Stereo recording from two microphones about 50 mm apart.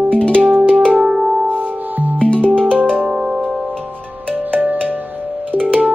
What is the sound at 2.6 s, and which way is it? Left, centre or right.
Music, right.